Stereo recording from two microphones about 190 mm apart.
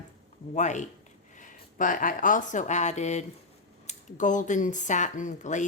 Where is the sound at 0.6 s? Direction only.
40° left (ahead or behind).